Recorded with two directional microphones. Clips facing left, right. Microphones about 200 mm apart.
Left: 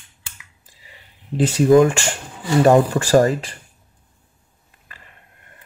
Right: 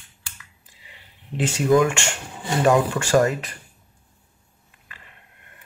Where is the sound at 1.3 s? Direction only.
35° left (ahead or behind).